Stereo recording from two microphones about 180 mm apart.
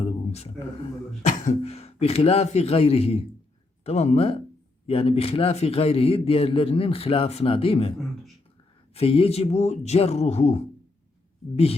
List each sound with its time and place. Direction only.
0.0 s speech: 35° left (ahead or behind)